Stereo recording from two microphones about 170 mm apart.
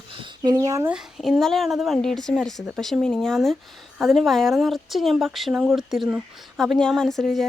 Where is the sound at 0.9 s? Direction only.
5° right (ahead or behind).